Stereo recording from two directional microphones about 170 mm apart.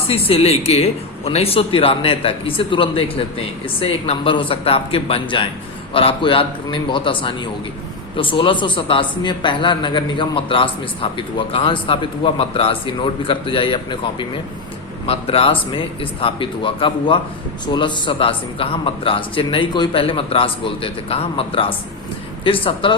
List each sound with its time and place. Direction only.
0.1 s a man's voice: 35° left (ahead or behind)